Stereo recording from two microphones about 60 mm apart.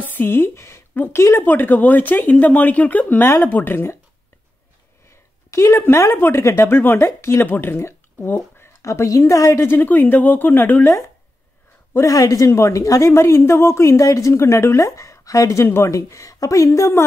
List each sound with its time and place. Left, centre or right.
0.0 s a woman's voice: left
1.4 s a woman's voice: left
5.1 s speech: left
6.4 s a woman's voice: left
7.4 s a woman's voice: left
7.8 s a sound: left
8.8 s speech: left
9.7 s a woman's voice: left
12.1 s speech: left
13.1 s a woman's voice: left
15.9 s speech: left